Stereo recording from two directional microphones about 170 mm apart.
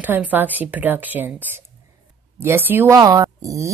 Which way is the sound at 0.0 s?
10° right (ahead or behind).